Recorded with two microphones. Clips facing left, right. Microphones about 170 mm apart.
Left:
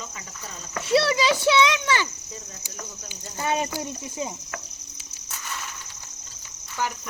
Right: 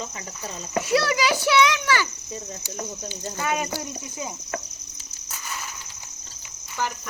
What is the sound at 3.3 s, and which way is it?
Speech, 30° left (ahead or behind).